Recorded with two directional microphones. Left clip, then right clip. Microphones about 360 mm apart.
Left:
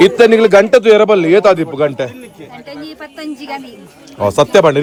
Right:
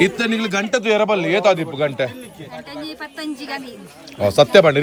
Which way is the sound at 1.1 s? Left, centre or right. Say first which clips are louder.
Left 7 dB; centre.